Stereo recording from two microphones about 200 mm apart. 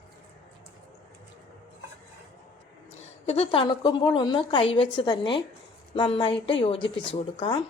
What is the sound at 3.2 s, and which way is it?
A woman's voice, 30° left (ahead or behind).